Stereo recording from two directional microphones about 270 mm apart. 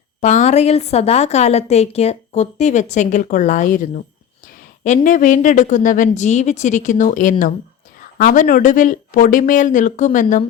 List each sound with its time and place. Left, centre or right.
0.2 s a woman's voice: left